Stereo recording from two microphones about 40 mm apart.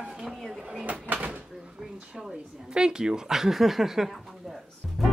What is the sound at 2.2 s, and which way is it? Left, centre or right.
Speech, centre.